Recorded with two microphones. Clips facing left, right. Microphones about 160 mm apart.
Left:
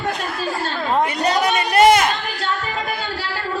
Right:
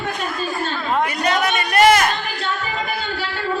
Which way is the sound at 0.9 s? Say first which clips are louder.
Left 1 dB; 35° left (ahead or behind).